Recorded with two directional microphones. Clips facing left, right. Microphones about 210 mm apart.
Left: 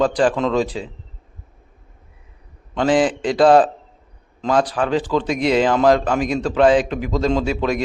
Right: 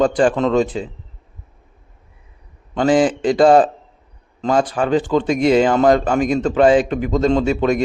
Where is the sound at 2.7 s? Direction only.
Centre (ahead or behind).